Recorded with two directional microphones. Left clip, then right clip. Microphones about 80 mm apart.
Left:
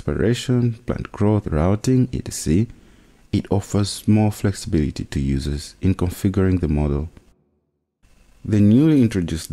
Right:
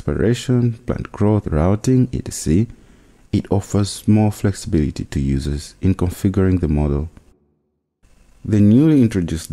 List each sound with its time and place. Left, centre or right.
0.0 s speech: left
8.5 s speech: left